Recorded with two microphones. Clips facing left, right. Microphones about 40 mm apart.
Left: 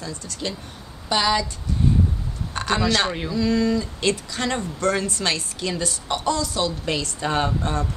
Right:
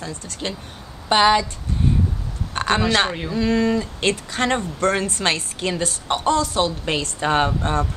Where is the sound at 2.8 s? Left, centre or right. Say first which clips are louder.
Right 2 dB; right.